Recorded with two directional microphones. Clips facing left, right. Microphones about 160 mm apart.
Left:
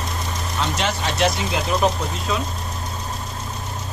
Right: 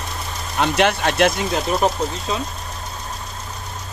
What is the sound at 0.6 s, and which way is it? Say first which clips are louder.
Speech: right 7 dB; 60° right (ahead or behind).